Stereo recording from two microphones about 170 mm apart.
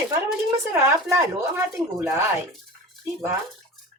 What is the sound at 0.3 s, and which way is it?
Speech, 5° right (ahead or behind).